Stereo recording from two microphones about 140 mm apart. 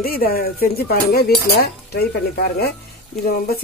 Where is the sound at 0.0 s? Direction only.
90° left.